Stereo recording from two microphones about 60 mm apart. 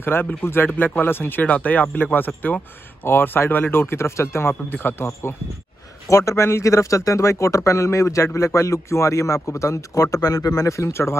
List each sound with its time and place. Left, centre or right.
0.0 s speech: left
6.0 s a man's voice: left
10.8 s speech: left